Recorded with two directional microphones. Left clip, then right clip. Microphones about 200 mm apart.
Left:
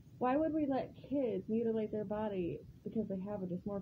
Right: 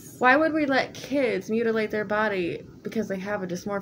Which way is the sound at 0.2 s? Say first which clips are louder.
Right 14 dB; 15° right (ahead or behind).